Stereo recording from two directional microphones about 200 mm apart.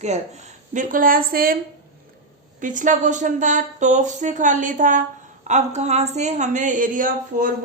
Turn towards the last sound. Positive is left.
turn(degrees=-40)  # may be behind; listen again after turning